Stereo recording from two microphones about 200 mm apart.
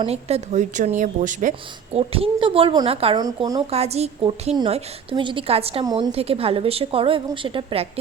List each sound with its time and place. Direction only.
0.0 s a woman's voice: 30° right (ahead or behind)
3.7 s a woman's voice: 30° right (ahead or behind)